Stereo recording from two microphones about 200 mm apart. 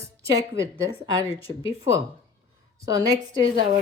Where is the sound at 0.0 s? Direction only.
15° right (ahead or behind).